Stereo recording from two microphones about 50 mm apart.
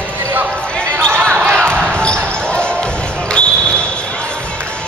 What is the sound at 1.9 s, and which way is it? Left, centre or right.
Basketball bounce, centre.